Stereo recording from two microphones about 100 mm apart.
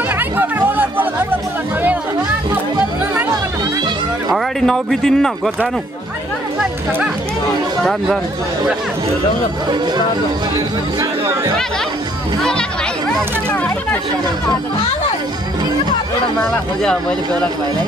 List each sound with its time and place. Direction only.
0.4 s music: 20° right (ahead or behind)
4.3 s speech: 5° left (ahead or behind)
12.4 s speech: 5° left (ahead or behind)
16.3 s speech: 5° left (ahead or behind)